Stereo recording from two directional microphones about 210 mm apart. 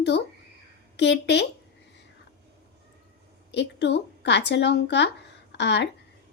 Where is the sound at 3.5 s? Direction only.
55° left (ahead or behind).